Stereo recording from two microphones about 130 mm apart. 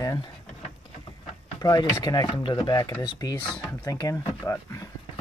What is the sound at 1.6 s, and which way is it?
Speech, 30° left (ahead or behind).